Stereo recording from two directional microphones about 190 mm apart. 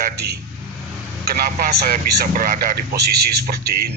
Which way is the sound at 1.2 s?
50° right (ahead or behind).